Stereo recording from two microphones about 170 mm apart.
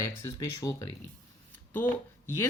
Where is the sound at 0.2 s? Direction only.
20° left (ahead or behind).